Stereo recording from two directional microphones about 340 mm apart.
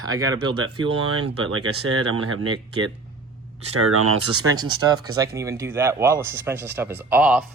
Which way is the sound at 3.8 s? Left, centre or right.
Right.